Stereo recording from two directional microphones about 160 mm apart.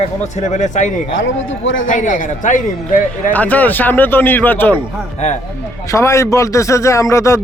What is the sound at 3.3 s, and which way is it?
Speech, 10° left (ahead or behind).